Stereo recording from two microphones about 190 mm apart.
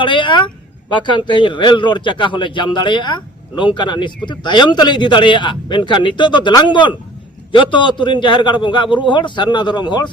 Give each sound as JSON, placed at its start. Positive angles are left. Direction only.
{"t": 0.0, "sound": "speech", "side_deg": 25}